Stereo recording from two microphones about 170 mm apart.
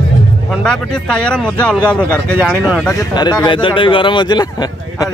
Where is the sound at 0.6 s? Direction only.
5° left (ahead or behind).